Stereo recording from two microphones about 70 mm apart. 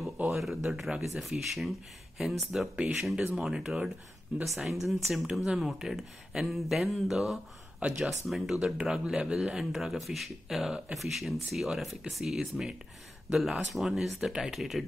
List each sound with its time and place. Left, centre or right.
0.3 s speech: centre
7.8 s speech: centre
8.3 s speech: centre